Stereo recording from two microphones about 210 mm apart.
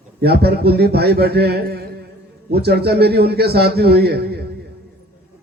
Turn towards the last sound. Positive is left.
turn(degrees=-50)  # may be behind; listen again after turning